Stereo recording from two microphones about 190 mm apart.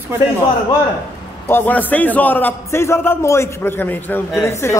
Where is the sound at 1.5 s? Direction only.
10° left (ahead or behind).